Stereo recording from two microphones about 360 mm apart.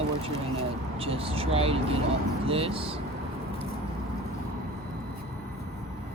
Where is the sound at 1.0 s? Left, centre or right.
Centre.